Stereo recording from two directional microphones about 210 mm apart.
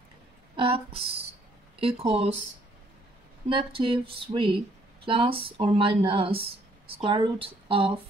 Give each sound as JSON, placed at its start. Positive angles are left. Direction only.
{"t": 0.6, "sound": "speech", "side_deg": -25}
{"t": 3.4, "sound": "speech", "side_deg": -25}